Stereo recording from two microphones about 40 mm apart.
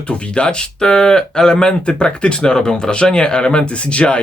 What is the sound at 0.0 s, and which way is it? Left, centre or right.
Speech, left.